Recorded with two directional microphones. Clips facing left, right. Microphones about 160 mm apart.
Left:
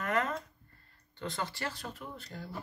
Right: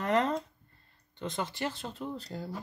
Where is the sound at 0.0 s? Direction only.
30° right (ahead or behind).